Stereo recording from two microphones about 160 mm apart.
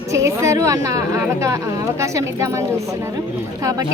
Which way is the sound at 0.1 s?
20° right (ahead or behind).